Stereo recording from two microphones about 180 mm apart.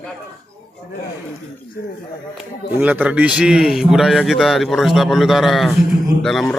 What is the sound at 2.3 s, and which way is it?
Speech, 10° right (ahead or behind).